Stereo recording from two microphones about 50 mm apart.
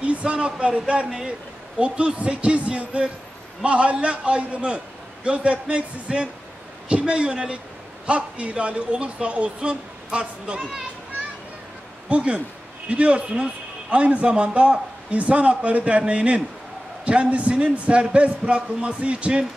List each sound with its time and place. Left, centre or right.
0.0 s a man's voice: right
12.1 s a man's voice: right